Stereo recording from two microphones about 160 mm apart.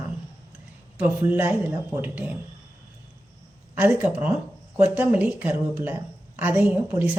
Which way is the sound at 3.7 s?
10° right (ahead or behind).